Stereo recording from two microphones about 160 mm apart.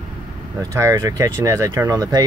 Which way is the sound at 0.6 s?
20° right (ahead or behind).